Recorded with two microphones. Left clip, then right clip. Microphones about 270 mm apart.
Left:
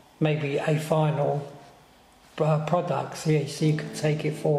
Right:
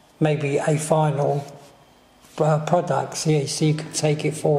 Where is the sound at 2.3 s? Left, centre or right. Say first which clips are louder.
Right 5 dB; right.